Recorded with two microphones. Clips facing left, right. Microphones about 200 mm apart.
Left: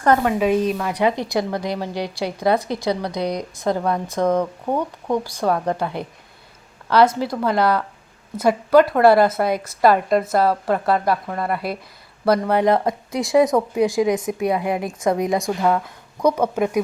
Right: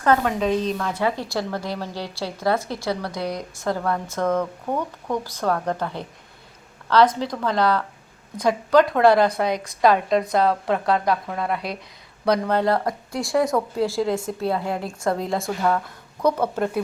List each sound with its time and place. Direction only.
0.0 s a woman's voice: 10° left (ahead or behind)